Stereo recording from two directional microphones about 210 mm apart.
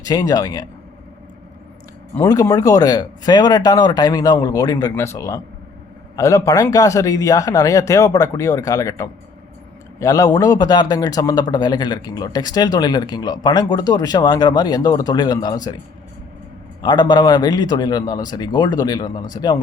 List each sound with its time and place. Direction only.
0.0 s speech: 15° left (ahead or behind)
2.1 s a man's voice: 15° left (ahead or behind)
16.8 s a man's voice: 20° left (ahead or behind)